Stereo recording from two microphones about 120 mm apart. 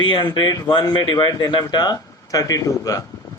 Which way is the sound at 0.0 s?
40° left (ahead or behind).